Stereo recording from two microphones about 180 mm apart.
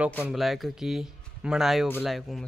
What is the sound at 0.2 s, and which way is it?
Speech, centre (ahead or behind).